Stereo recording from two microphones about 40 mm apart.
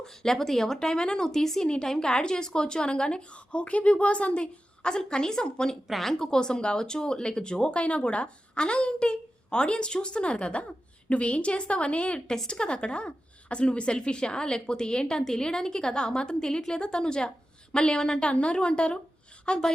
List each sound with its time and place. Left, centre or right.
0.0 s speech: centre
1.3 s a woman's voice: centre
5.9 s speech: centre
6.1 s a woman's voice: centre